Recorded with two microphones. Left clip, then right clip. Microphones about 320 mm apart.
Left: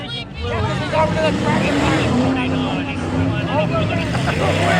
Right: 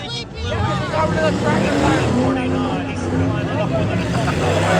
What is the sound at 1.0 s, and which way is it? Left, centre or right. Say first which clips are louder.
Vehicle: left 2 dB; left.